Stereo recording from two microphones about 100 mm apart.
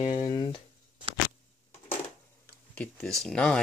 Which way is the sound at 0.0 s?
90° left.